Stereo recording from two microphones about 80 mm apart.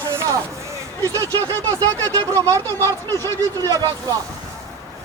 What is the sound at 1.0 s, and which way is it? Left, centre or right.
Speech, right.